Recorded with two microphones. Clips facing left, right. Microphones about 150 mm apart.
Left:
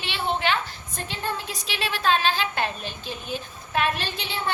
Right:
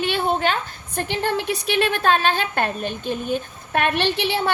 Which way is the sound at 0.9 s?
65° right (ahead or behind).